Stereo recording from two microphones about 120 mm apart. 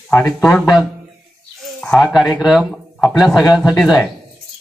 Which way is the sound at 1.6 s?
5° left (ahead or behind).